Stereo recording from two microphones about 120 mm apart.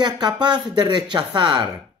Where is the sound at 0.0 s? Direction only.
40° right (ahead or behind).